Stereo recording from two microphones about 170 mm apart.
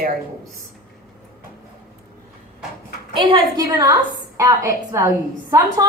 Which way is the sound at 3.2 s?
25° right (ahead or behind).